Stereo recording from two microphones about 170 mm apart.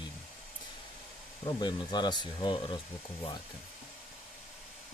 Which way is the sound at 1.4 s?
25° left (ahead or behind).